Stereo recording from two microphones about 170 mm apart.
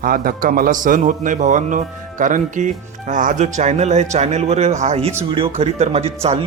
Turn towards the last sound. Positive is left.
turn(degrees=-35)  # may be behind; listen again after turning